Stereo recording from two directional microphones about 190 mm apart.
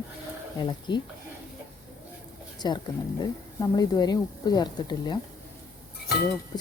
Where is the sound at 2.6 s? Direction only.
20° left (ahead or behind).